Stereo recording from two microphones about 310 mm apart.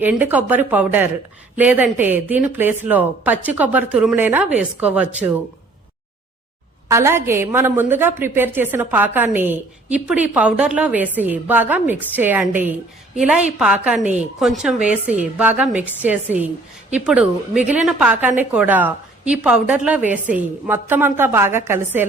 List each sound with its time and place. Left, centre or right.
0.0 s a woman's voice: centre
6.8 s a woman's voice: centre